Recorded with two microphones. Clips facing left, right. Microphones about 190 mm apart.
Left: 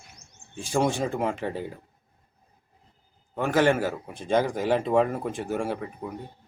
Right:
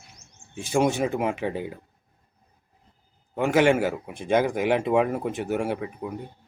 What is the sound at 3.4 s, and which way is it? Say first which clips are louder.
A man's voice: right 2 dB; 10° right (ahead or behind).